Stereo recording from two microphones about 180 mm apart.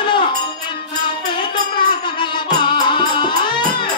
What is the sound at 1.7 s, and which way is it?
Music, 25° left (ahead or behind).